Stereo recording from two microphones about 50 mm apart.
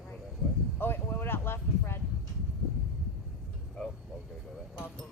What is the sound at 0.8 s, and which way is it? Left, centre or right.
Speech, left.